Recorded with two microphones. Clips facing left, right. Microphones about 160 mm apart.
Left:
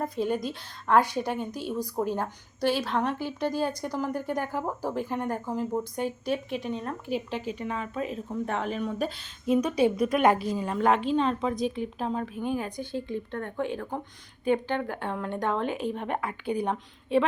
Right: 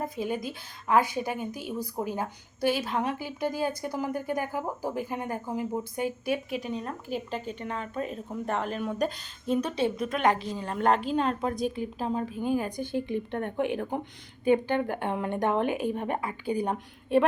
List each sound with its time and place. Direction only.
0.0 s a woman's voice: centre (ahead or behind)
12.9 s speech: 15° right (ahead or behind)
14.8 s speech: 15° right (ahead or behind)
15.6 s speech: 55° right (ahead or behind)
15.9 s a woman's voice: 5° right (ahead or behind)